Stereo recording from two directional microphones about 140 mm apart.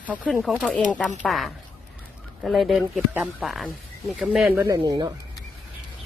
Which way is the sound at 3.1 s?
10° right (ahead or behind).